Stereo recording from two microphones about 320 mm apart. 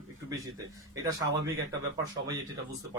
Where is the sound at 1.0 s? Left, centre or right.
Centre.